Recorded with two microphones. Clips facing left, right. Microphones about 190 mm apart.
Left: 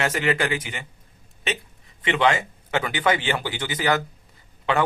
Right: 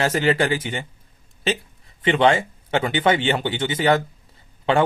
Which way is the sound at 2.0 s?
30° right (ahead or behind).